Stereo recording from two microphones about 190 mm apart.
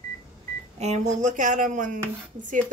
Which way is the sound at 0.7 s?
35° right (ahead or behind).